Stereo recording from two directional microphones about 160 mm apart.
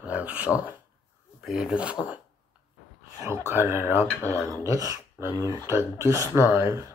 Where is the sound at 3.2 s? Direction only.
15° right (ahead or behind).